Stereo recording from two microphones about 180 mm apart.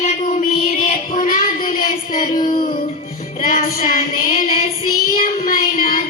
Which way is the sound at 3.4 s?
50° left (ahead or behind).